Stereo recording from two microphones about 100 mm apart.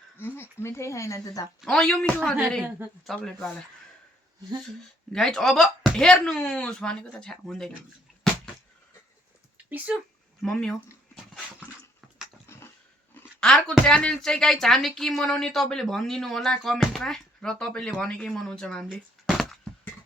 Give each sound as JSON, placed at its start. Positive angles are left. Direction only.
{"t": 0.2, "sound": "speech", "side_deg": 25}
{"t": 1.6, "sound": "speech", "side_deg": 10}
{"t": 5.1, "sound": "speech", "side_deg": 5}
{"t": 9.6, "sound": "speech", "side_deg": -15}
{"t": 10.4, "sound": "speech", "side_deg": 5}
{"t": 13.4, "sound": "speech", "side_deg": 10}
{"t": 19.2, "sound": "a sound", "side_deg": 0}